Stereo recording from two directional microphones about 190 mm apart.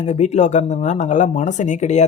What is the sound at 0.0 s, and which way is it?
Speech, 35° left (ahead or behind).